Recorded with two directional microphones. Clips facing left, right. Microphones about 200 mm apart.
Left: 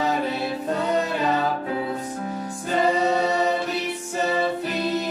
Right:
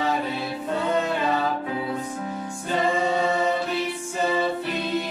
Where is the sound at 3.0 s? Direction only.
40° left (ahead or behind).